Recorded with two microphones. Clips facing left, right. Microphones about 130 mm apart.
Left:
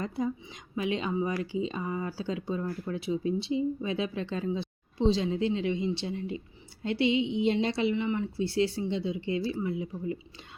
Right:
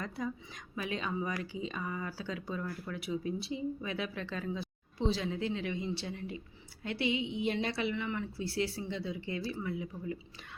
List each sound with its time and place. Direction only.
0.0 s speech: 30° left (ahead or behind)